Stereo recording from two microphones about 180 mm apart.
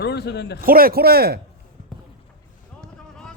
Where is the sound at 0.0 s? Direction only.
65° left (ahead or behind).